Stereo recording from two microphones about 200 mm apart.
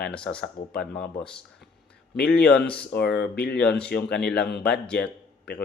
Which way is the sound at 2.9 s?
55° left (ahead or behind).